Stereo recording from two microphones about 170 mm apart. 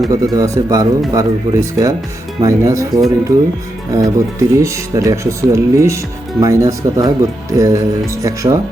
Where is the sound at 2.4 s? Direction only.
20° right (ahead or behind).